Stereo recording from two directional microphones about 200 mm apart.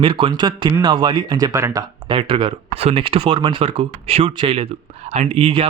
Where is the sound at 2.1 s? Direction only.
25° right (ahead or behind).